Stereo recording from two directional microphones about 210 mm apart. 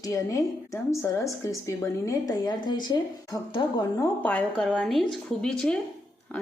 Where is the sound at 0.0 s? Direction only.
15° left (ahead or behind).